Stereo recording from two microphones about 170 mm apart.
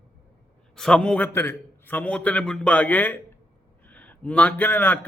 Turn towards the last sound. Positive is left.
turn(degrees=10)  # may be behind; listen again after turning